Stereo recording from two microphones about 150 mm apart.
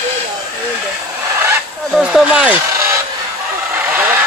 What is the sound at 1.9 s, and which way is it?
Speech, 5° right (ahead or behind).